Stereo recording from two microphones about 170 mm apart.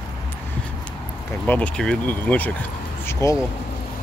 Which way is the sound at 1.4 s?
5° left (ahead or behind).